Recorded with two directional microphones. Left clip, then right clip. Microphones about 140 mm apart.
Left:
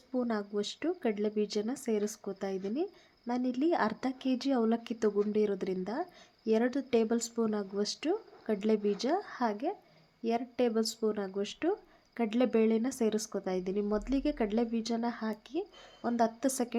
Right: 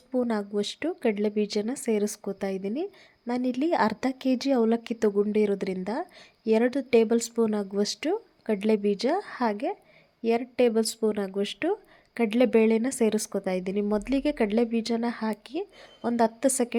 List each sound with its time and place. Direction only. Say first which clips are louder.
0.1 s speech: right 6 dB; 30° right (ahead or behind)